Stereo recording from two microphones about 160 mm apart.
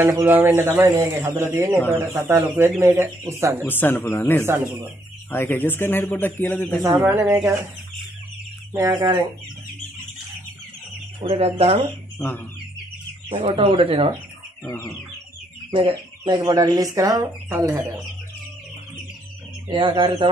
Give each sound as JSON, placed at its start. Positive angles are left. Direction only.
{"t": 0.0, "sound": "speech", "side_deg": -15}
{"t": 3.6, "sound": "speech", "side_deg": 15}
{"t": 6.8, "sound": "speech", "side_deg": -15}
{"t": 8.7, "sound": "speech", "side_deg": -20}
{"t": 11.2, "sound": "speech", "side_deg": -40}
{"t": 13.5, "sound": "speech", "side_deg": -30}
{"t": 14.6, "sound": "speech", "side_deg": 15}
{"t": 15.7, "sound": "speech", "side_deg": -30}
{"t": 19.7, "sound": "speech", "side_deg": -30}